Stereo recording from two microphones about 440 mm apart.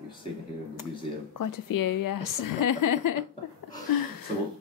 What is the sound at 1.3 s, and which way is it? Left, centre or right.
Speech, left.